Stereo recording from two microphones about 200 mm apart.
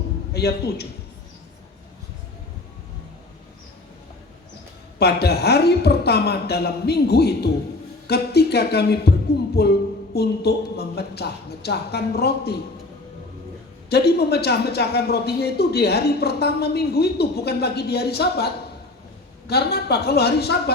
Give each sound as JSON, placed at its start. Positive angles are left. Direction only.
{"t": 0.3, "sound": "a man's voice", "side_deg": 55}
{"t": 4.9, "sound": "a man's voice", "side_deg": 55}
{"t": 13.9, "sound": "a man's voice", "side_deg": 55}